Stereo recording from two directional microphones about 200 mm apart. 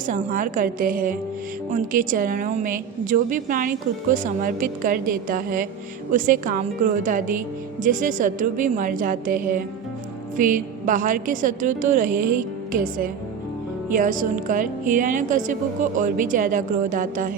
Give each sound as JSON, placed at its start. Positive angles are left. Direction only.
{"t": 0.0, "sound": "a woman's voice", "side_deg": -40}